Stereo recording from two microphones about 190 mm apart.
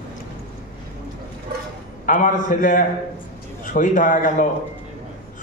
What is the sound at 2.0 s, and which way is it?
A man's voice, 45° left (ahead or behind).